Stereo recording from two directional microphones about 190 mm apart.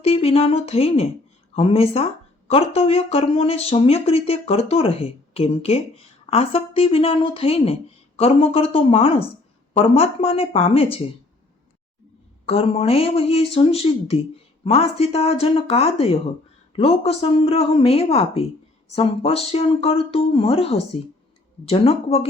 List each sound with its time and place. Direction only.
0.0 s speech: 30° left (ahead or behind)
12.5 s speech: 30° left (ahead or behind)